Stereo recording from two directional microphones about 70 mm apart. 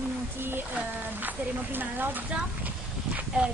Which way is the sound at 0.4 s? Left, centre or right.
Right.